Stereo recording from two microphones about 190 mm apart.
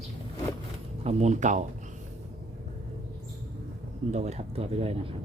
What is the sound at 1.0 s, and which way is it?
Speech, 40° right (ahead or behind).